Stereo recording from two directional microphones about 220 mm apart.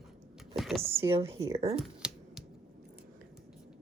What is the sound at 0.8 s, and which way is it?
Speech, 25° right (ahead or behind).